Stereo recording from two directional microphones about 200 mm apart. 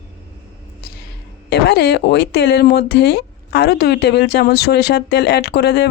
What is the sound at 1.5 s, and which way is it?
Speech, 55° left (ahead or behind).